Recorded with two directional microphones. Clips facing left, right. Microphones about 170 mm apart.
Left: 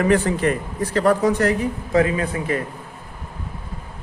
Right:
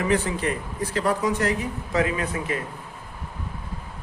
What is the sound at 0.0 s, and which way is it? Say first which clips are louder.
A man's voice: left 6 dB; 55° left (ahead or behind).